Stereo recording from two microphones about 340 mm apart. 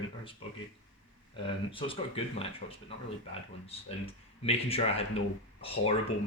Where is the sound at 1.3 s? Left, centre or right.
Centre.